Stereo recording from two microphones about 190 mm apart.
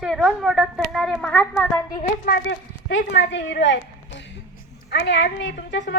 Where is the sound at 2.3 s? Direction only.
75° left (ahead or behind).